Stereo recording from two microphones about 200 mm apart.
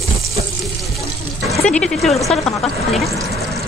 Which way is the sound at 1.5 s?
5° left (ahead or behind).